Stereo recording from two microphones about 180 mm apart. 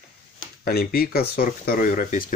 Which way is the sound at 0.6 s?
60° left (ahead or behind).